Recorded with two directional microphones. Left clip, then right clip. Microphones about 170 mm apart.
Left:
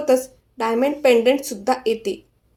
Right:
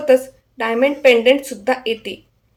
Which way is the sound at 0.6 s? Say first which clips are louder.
Right 3 dB; 35° left (ahead or behind).